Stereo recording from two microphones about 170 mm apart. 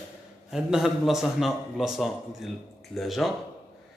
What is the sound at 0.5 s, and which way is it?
A man's voice, 5° right (ahead or behind).